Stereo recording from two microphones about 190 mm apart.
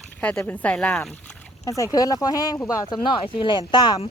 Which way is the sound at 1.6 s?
15° left (ahead or behind).